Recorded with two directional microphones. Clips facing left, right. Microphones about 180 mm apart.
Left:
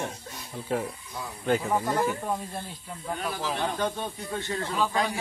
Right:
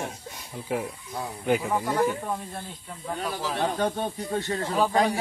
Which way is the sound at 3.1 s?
40° right (ahead or behind).